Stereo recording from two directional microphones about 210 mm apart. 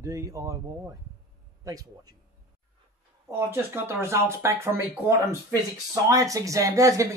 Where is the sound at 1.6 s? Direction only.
15° right (ahead or behind).